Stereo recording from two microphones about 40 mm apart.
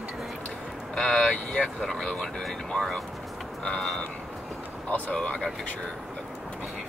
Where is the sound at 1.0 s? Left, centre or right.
Left.